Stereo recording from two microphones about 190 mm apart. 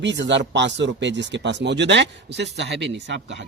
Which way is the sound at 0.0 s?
70° right (ahead or behind).